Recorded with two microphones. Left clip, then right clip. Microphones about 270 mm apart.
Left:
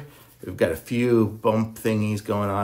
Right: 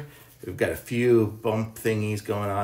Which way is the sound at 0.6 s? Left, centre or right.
Centre.